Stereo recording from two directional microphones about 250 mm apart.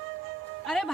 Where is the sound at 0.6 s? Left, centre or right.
Centre.